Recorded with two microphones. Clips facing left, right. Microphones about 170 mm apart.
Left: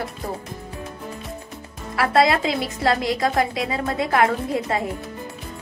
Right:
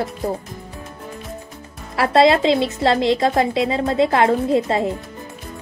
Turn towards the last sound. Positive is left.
turn(degrees=-25)  # may be behind; listen again after turning